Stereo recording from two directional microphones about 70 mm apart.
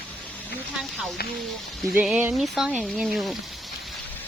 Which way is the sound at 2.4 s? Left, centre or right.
Centre.